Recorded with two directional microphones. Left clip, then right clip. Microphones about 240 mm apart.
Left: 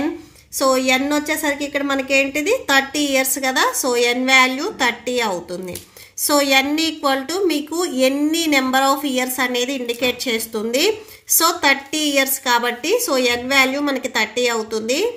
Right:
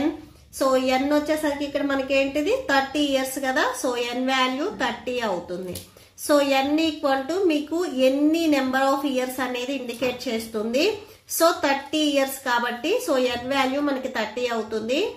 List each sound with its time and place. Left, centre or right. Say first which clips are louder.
0.6 s a woman's voice: left 4 dB; left